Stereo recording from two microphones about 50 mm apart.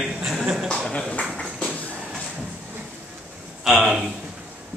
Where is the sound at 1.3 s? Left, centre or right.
Centre.